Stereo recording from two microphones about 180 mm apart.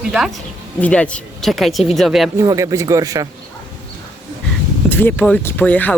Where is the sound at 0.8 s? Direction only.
5° left (ahead or behind).